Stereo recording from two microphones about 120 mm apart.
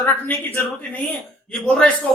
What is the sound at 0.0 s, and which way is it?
A man's voice, 15° left (ahead or behind).